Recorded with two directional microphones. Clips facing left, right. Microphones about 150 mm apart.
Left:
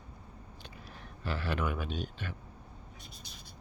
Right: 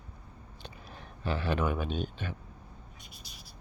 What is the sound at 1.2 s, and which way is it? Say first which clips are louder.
Speech: right 4 dB; 20° right (ahead or behind).